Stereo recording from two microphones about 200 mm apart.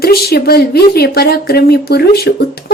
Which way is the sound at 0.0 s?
50° left (ahead or behind).